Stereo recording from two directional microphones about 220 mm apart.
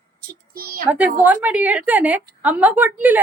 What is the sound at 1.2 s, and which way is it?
Speech, 5° right (ahead or behind).